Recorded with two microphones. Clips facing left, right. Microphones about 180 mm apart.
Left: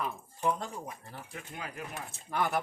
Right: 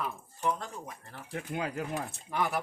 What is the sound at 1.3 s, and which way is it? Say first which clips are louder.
Speech: right 10 dB; 70° right (ahead or behind).